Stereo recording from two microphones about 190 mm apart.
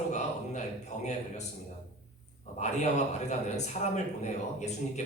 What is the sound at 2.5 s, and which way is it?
A man's voice, 35° left (ahead or behind).